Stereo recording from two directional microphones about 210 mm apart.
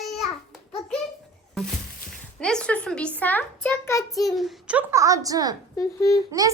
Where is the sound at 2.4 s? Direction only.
5° left (ahead or behind).